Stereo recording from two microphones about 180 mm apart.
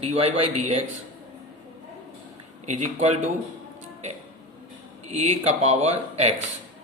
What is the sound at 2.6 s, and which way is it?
Speech, 40° right (ahead or behind).